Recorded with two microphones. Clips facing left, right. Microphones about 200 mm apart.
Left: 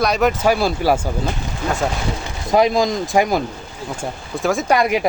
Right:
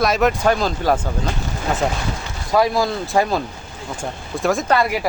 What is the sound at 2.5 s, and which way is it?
Speech, 20° left (ahead or behind).